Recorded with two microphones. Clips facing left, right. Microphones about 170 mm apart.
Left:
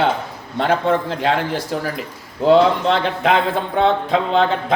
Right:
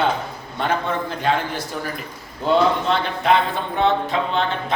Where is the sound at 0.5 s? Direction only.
90° left.